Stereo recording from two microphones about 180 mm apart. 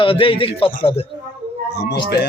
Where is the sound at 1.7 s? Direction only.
65° left (ahead or behind).